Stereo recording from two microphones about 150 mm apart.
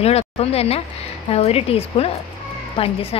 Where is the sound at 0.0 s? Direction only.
45° left (ahead or behind).